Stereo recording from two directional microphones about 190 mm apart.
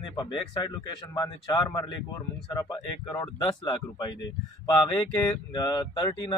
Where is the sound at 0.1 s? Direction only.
25° left (ahead or behind).